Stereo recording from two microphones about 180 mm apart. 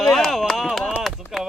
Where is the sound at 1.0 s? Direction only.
Centre (ahead or behind).